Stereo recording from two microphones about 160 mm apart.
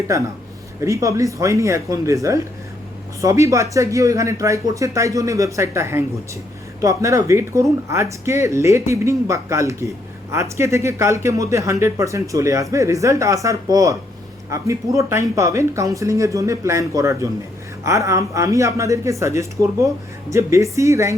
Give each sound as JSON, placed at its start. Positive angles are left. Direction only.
{"t": 0.8, "sound": "speech", "side_deg": -20}